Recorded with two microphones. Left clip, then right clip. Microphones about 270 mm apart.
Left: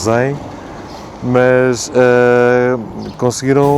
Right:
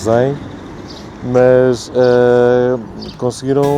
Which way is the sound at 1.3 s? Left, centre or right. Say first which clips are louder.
Right 1 dB; left.